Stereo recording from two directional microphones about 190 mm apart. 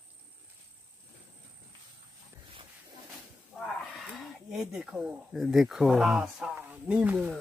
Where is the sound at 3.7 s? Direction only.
Centre (ahead or behind).